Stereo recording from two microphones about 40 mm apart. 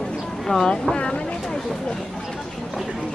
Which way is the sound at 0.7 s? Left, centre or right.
Left.